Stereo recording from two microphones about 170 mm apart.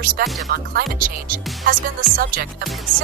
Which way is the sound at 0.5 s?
60° right (ahead or behind).